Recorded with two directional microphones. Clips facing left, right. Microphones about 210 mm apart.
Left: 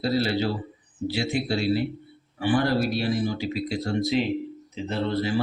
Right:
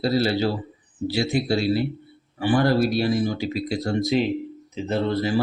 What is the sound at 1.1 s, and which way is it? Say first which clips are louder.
Speech: right 4 dB; 40° right (ahead or behind).